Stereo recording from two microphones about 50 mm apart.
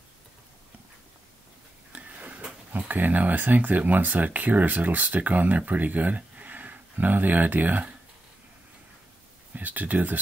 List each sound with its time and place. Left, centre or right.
1.9 s a sound: right
2.7 s speech: right
9.5 s speech: right